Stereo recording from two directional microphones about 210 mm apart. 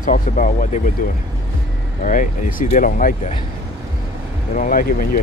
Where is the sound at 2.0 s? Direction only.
40° left (ahead or behind).